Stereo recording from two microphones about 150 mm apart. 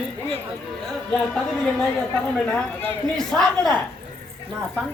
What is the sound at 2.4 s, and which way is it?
Speech, 10° left (ahead or behind).